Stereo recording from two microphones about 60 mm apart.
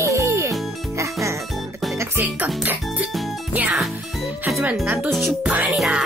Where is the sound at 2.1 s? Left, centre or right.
Right.